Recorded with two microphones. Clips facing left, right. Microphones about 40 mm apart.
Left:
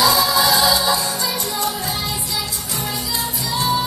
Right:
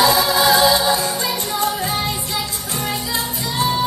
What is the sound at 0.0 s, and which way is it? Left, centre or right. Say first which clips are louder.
Music: right 1 dB; right.